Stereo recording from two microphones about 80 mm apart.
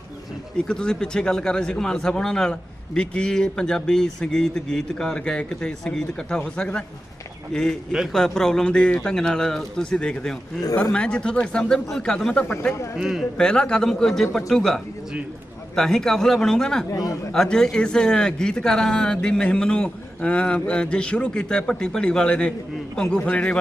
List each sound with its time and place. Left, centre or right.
0.7 s a man's voice: centre
13.0 s a man's voice: centre
13.3 s speech: centre
16.9 s a man's voice: left
17.3 s speech: centre